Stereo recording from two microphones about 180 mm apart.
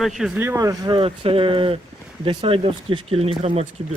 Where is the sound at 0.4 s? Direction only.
20° right (ahead or behind); by 3.7 s 35° right (ahead or behind).